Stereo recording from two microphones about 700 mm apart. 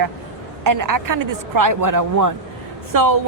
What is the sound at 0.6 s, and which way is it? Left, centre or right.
A man's voice, right.